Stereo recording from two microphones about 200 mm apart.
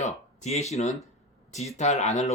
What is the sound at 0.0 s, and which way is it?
Speech, 35° left (ahead or behind).